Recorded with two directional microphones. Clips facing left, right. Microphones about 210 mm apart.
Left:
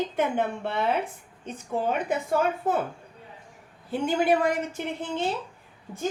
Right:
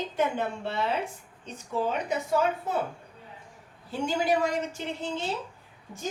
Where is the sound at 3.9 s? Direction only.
55° left (ahead or behind).